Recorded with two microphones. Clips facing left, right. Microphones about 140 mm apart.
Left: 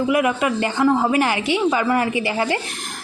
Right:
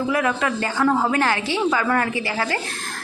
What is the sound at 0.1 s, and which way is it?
A woman's voice, 15° left (ahead or behind).